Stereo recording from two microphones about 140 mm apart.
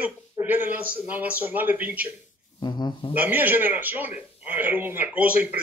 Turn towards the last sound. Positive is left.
turn(degrees=-10)  # may be behind; listen again after turning